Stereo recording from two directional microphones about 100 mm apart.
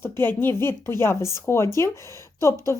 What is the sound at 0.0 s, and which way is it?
A woman's voice, 25° left (ahead or behind).